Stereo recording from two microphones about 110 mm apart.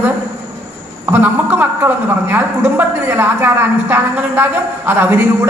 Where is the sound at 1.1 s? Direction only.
20° right (ahead or behind).